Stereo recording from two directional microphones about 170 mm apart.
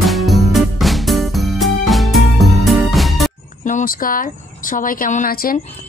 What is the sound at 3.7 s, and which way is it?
A woman's voice, 50° left (ahead or behind).